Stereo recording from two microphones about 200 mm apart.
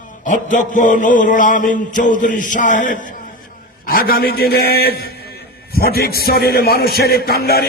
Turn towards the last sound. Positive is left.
turn(degrees=50)  # may be behind; listen again after turning